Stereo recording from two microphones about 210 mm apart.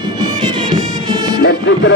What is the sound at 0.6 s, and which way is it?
Music, 20° right (ahead or behind).